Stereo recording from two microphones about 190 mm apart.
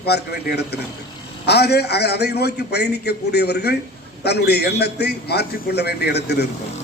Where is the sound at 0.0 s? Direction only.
60° left (ahead or behind).